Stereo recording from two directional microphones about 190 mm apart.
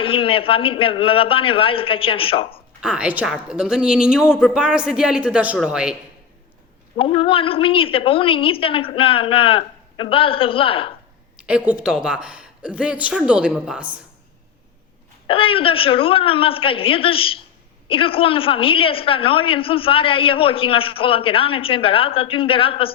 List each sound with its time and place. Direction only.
0.0 s a woman's voice: 30° left (ahead or behind)
2.8 s a man's voice: 5° right (ahead or behind)
6.9 s a woman's voice: 30° left (ahead or behind)
11.3 s a man's voice: 5° right (ahead or behind)
15.3 s a woman's voice: 30° left (ahead or behind)